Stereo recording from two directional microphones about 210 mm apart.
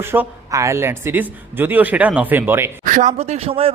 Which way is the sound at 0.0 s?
10° right (ahead or behind).